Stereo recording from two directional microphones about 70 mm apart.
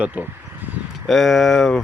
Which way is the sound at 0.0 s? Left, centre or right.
Right.